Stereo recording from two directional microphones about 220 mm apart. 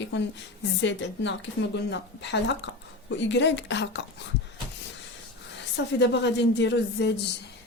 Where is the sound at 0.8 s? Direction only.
55° left (ahead or behind).